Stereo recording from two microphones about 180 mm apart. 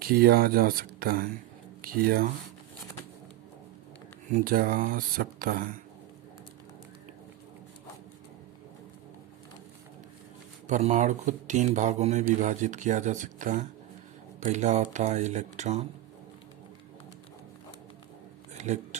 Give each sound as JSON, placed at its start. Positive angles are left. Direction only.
{"t": 0.0, "sound": "speech", "side_deg": -55}
{"t": 4.3, "sound": "speech", "side_deg": -50}
{"t": 10.7, "sound": "speech", "side_deg": -40}
{"t": 18.5, "sound": "a sound", "side_deg": -40}